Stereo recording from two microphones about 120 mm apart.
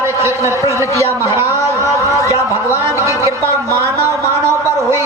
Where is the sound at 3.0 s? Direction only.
25° right (ahead or behind).